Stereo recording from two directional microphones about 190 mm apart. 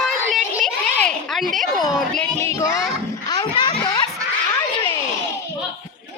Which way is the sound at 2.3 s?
15° left (ahead or behind).